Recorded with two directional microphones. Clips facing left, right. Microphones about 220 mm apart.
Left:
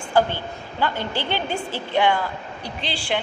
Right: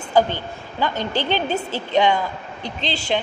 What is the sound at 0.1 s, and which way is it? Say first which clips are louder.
A woman's voice: right 2 dB; 15° right (ahead or behind).